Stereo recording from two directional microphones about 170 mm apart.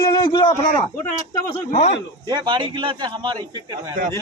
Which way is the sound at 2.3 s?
25° right (ahead or behind).